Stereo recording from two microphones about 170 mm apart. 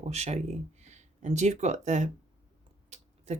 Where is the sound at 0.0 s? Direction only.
40° right (ahead or behind).